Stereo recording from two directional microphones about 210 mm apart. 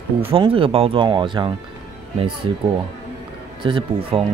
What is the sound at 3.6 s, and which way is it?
Speech, 25° right (ahead or behind).